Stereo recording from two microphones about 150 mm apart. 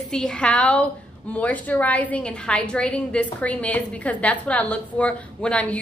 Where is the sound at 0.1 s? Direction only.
5° left (ahead or behind).